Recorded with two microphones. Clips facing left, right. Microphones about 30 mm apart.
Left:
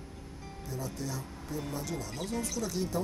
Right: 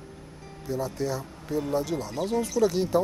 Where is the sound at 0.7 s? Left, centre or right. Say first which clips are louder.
Right 9 dB; right.